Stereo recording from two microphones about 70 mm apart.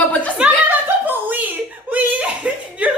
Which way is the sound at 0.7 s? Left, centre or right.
Right.